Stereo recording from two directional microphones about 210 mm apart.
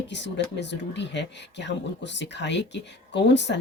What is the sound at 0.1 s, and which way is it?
Speech, 55° left (ahead or behind).